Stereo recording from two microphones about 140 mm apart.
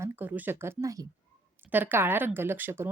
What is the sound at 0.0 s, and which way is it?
A woman's voice, 15° right (ahead or behind).